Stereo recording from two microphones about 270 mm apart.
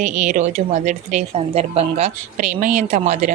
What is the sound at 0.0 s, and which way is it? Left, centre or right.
Speech, right.